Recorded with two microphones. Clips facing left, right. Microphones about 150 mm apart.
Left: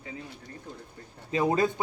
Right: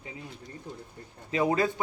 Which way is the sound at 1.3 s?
25° left (ahead or behind).